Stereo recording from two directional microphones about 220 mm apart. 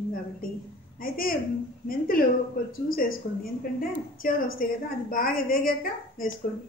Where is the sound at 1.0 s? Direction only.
40° left (ahead or behind).